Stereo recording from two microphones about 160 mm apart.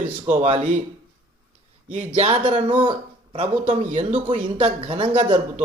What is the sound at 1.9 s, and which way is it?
Speech, 45° right (ahead or behind).